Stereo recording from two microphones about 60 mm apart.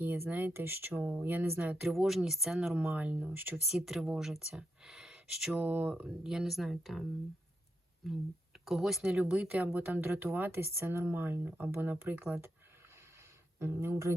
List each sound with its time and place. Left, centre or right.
0.0 s speech: right
1.1 s speech: right
1.9 s speech: centre
2.9 s speech: right
3.7 s speech: centre
5.5 s speech: right
6.2 s speech: centre
8.0 s speech: centre
9.7 s speech: right
13.6 s speech: right